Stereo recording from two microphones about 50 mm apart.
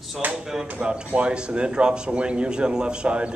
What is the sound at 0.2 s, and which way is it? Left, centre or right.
Speech, right.